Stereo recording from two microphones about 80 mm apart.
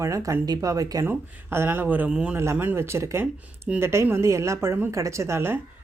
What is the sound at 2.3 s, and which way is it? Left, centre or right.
A woman's voice, right.